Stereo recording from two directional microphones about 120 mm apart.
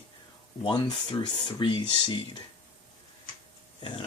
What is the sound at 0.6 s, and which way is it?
Speech, 40° left (ahead or behind).